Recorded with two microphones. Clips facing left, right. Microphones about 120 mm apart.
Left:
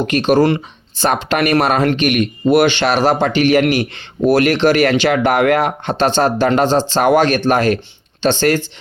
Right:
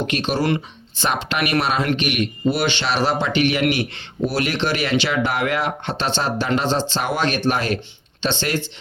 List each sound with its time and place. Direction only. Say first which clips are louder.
0.1 s speech: left 11 dB; 50° left (ahead or behind)